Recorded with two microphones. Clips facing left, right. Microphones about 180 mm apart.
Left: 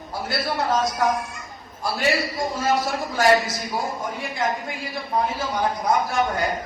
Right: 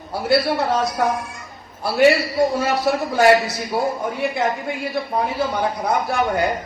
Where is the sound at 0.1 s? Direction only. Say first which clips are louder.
Right 10 dB; 65° right (ahead or behind).